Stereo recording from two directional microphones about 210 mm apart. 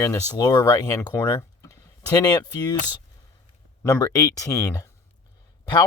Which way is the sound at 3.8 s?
15° left (ahead or behind).